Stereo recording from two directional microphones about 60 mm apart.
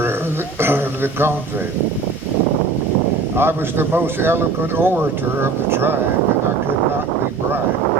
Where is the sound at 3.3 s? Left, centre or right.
Right.